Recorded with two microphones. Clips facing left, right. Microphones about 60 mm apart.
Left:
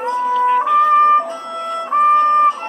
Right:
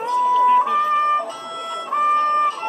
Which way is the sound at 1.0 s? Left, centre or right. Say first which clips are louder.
Left 6 dB; left.